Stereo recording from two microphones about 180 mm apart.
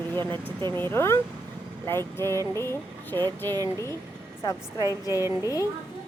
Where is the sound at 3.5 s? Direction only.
20° right (ahead or behind).